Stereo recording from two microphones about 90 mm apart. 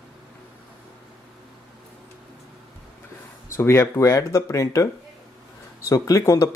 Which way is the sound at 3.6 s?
30° left (ahead or behind).